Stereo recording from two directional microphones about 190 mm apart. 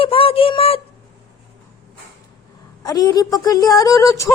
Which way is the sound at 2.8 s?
20° left (ahead or behind).